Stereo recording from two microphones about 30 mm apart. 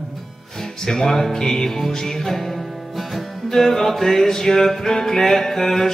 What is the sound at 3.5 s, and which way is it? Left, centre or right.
Mantra, centre.